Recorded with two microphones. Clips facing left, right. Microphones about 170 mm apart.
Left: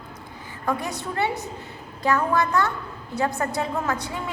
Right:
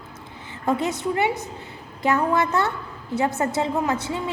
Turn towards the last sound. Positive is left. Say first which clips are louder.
# right 3 dB
turn(degrees=-20)  # may be behind; listen again after turning